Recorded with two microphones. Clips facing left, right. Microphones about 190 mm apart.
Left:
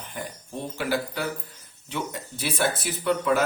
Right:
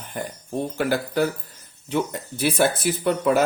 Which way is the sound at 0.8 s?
45° right (ahead or behind).